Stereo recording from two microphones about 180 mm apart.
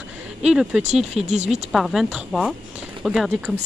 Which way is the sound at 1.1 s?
35° right (ahead or behind).